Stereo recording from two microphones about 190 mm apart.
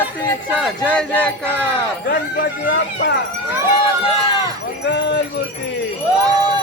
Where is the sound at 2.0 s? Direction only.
55° left (ahead or behind).